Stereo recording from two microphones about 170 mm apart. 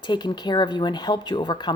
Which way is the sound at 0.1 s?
25° left (ahead or behind).